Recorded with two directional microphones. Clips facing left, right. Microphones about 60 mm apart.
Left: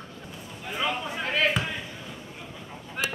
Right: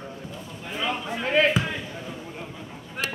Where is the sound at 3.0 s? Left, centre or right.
Centre.